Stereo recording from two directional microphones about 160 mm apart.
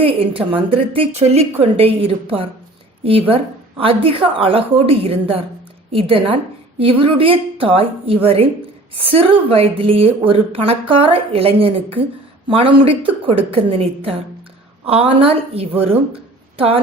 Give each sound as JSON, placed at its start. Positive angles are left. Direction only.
{"t": 0.0, "sound": "a woman's voice", "side_deg": -35}